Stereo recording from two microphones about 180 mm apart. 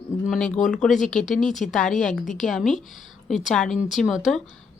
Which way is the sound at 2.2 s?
45° left (ahead or behind).